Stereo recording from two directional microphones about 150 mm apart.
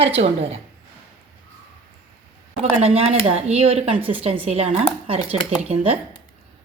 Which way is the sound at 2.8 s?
45° right (ahead or behind).